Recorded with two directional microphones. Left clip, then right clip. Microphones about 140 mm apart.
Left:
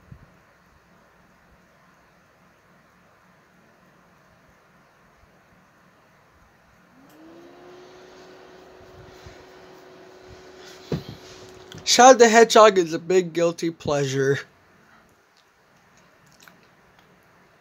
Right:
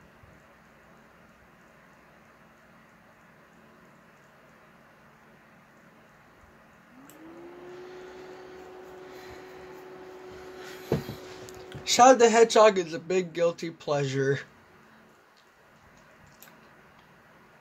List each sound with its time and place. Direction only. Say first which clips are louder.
11.8 s speech: left 5 dB; 70° left (ahead or behind); by 14.5 s 50° left (ahead or behind)